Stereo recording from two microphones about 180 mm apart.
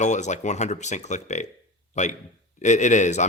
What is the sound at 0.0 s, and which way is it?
Speech, 40° left (ahead or behind).